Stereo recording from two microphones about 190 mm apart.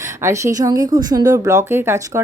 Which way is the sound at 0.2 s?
15° right (ahead or behind).